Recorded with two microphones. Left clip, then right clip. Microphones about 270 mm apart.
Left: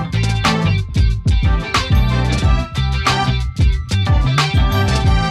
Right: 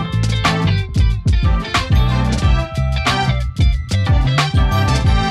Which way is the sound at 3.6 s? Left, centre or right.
Centre.